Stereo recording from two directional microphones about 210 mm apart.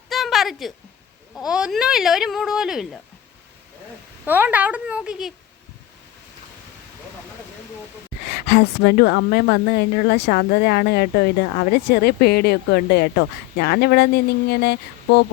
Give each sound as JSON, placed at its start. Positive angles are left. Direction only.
{"t": 0.1, "sound": "a sound", "side_deg": 0}
{"t": 1.4, "sound": "speech", "side_deg": -5}
{"t": 4.3, "sound": "a woman's voice", "side_deg": -10}
{"t": 8.3, "sound": "speech", "side_deg": 50}